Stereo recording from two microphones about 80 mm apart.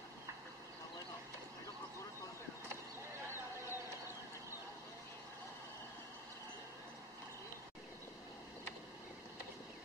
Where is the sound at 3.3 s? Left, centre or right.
Right.